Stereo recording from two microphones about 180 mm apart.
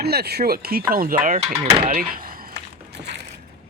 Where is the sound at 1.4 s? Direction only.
35° right (ahead or behind).